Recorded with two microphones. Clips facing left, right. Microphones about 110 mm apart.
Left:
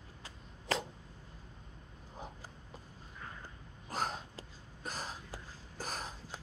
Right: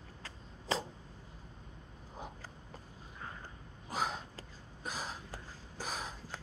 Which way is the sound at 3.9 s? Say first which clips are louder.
Right 1 dB; 5° right (ahead or behind).